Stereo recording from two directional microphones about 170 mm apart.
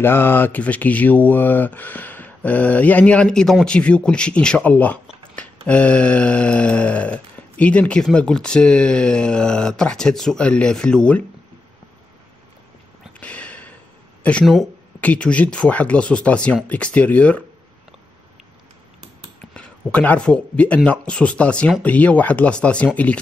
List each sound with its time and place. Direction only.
0.0 s speech: 15° left (ahead or behind)
5.3 s mantra: 5° left (ahead or behind)
13.2 s a sound: 5° left (ahead or behind)
14.2 s speech: 5° left (ahead or behind)
19.5 s speech: 5° left (ahead or behind)